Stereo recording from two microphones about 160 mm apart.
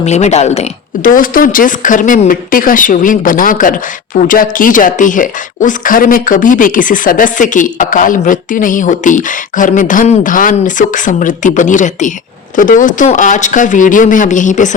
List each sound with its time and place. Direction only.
0.0 s speech: 45° left (ahead or behind)
1.0 s speech: 60° left (ahead or behind)